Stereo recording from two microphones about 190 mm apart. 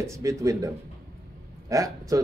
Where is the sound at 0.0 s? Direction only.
15° right (ahead or behind).